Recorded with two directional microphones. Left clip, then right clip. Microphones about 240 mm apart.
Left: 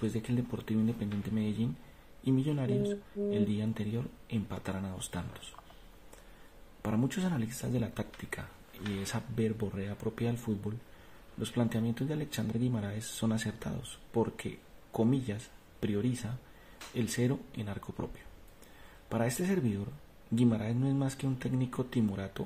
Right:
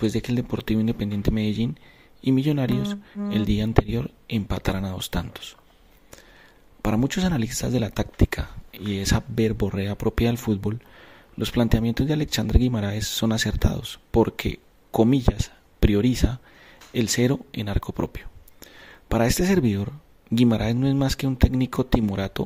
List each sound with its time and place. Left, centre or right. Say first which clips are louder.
0.0 s speech: right 10 dB; right
6.8 s speech: right 10 dB; right